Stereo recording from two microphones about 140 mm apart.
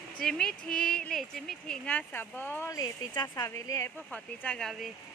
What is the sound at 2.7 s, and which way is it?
Speech, 30° left (ahead or behind).